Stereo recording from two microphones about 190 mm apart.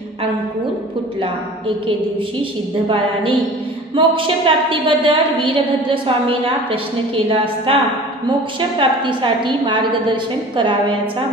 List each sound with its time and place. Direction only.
2.9 s a woman's voice: 25° right (ahead or behind)